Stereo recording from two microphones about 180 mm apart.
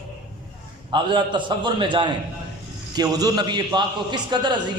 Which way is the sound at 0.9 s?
25° right (ahead or behind).